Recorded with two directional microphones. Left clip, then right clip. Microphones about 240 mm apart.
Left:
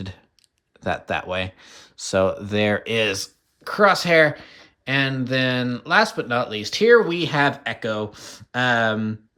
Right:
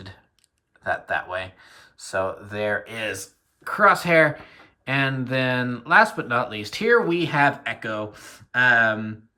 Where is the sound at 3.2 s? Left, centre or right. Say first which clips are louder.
Left 8 dB; centre.